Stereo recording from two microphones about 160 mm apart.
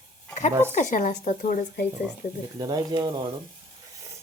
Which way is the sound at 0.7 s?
50° left (ahead or behind).